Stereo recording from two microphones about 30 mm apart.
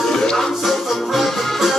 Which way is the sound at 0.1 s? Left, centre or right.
Left.